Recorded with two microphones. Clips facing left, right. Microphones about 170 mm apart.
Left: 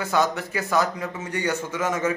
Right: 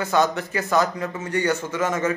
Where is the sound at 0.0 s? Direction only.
10° left (ahead or behind).